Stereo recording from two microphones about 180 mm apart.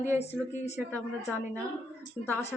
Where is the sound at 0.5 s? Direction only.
40° left (ahead or behind).